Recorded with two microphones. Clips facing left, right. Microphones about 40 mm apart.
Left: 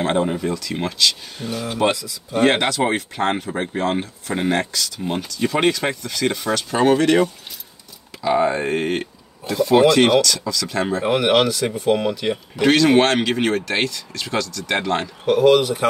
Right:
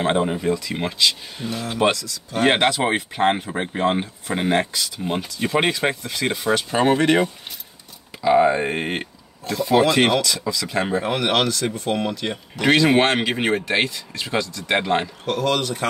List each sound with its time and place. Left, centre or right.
0.0 s speech: centre
1.6 s speech: centre
2.4 s speech: centre
8.1 s a sound: right
8.5 s speech: centre
9.5 s speech: centre
9.8 s speech: centre
11.1 s speech: centre
12.7 s speech: centre
15.2 s speech: centre